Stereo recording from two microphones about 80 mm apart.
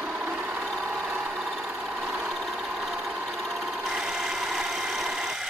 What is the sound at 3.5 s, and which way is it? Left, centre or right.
Engine, centre.